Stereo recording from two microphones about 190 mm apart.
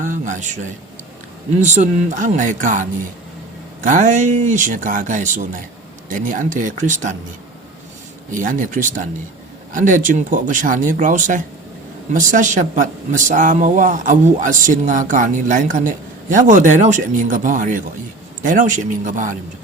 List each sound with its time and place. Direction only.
0.0 s speech: 40° right (ahead or behind)
1.6 s speech: 40° right (ahead or behind)
8.3 s speech: 45° right (ahead or behind)